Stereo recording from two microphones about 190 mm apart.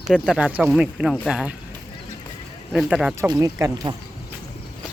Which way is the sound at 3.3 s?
20° right (ahead or behind).